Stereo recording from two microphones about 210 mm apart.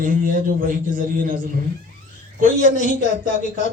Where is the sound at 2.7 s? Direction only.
35° left (ahead or behind).